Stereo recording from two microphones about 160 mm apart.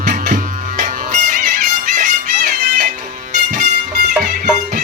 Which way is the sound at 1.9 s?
55° right (ahead or behind).